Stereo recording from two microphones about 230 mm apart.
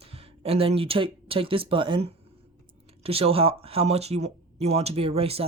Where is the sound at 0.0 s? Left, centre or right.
Right.